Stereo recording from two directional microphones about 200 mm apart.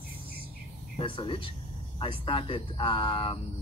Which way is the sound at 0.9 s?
25° left (ahead or behind).